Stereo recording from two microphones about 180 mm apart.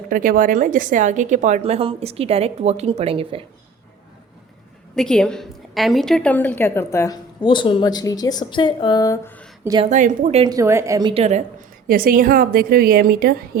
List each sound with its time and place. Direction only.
0.1 s a woman's voice: 50° right (ahead or behind); by 3.4 s 30° right (ahead or behind)
4.9 s a woman's voice: 5° left (ahead or behind); by 9.3 s 20° left (ahead or behind)
9.8 s a woman's voice: 45° right (ahead or behind)
10.4 s a woman's voice: 20° right (ahead or behind)
11.1 s a woman's voice: 35° right (ahead or behind)
11.9 s a woman's voice: 55° right (ahead or behind)